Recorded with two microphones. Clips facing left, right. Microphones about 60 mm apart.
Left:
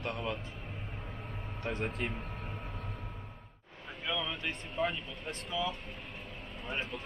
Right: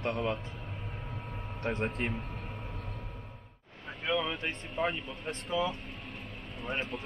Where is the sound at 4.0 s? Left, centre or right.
Right.